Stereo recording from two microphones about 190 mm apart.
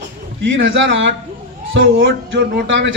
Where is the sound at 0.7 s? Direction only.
75° right (ahead or behind).